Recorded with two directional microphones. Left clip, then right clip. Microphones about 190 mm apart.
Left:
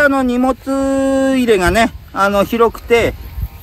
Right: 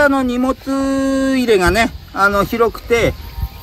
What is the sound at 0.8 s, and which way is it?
Speech, 45° left (ahead or behind).